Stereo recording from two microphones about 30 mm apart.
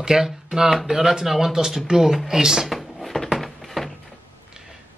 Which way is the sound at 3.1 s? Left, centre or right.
Centre.